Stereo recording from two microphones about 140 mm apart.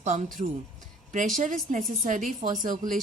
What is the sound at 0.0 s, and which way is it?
Speech, 55° right (ahead or behind).